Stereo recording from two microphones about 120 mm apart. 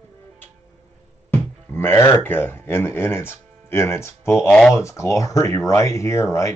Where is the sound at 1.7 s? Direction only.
20° left (ahead or behind).